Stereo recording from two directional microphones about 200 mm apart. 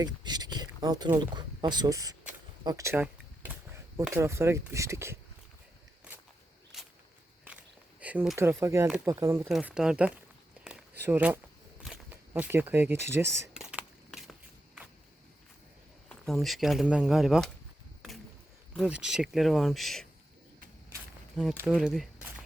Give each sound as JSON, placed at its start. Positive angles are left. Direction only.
{"t": 0.0, "sound": "speech", "side_deg": -20}
{"t": 7.4, "sound": "speech", "side_deg": -5}
{"t": 10.6, "sound": "a sound", "side_deg": -10}
{"t": 11.9, "sound": "speech", "side_deg": -10}
{"t": 13.5, "sound": "a sound", "side_deg": -5}
{"t": 16.0, "sound": "speech", "side_deg": 0}
{"t": 18.8, "sound": "speech", "side_deg": -5}
{"t": 21.6, "sound": "speech", "side_deg": -5}